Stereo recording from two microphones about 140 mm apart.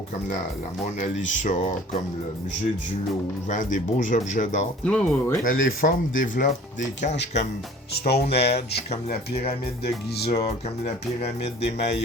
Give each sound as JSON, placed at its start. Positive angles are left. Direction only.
{"t": 0.9, "sound": "speech", "side_deg": 55}
{"t": 3.5, "sound": "speech", "side_deg": 65}
{"t": 4.9, "sound": "speech", "side_deg": 10}
{"t": 5.4, "sound": "speech", "side_deg": 90}
{"t": 10.2, "sound": "speech", "side_deg": 45}